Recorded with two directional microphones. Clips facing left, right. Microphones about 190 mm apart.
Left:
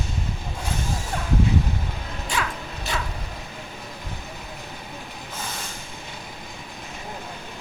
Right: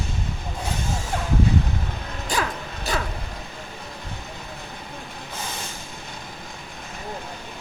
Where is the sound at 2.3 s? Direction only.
35° right (ahead or behind).